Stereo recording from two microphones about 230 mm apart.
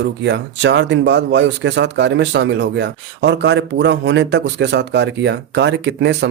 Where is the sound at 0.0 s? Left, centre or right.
Right.